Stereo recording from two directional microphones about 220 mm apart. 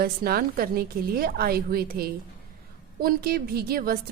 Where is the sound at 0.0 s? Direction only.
45° right (ahead or behind).